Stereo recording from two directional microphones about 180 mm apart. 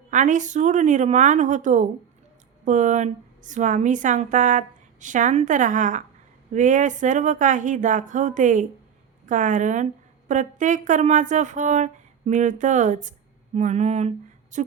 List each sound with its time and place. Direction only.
0.1 s speech: 45° right (ahead or behind)